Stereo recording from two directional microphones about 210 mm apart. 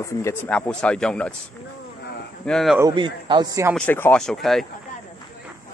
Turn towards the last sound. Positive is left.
turn(degrees=0)  # may be behind; listen again after turning